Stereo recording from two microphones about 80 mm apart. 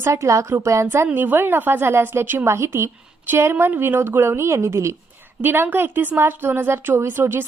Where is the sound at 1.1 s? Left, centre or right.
Right.